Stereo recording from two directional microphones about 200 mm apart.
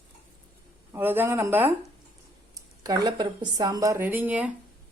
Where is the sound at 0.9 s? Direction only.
10° right (ahead or behind).